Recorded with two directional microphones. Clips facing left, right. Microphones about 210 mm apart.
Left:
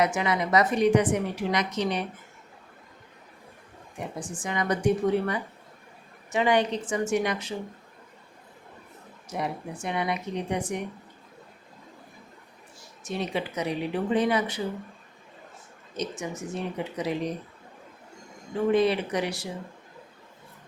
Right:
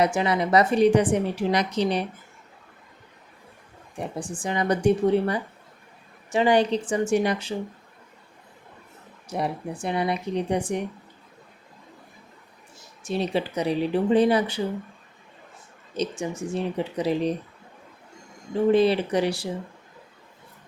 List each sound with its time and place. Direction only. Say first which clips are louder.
0.0 s a woman's voice: right 3 dB; 30° right (ahead or behind)
4.2 s a woman's voice: right 4 dB; 30° right (ahead or behind)
9.3 s a woman's voice: right 4 dB; 30° right (ahead or behind)
13.1 s a woman's voice: right 4 dB; 30° right (ahead or behind)
16.0 s a woman's voice: right 4 dB; 30° right (ahead or behind)
18.7 s a woman's voice: right 3 dB; 30° right (ahead or behind)